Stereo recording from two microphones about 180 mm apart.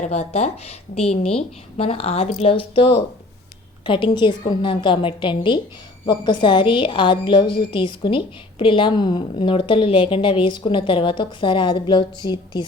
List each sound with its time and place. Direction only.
0.0 s a woman's voice: 35° left (ahead or behind)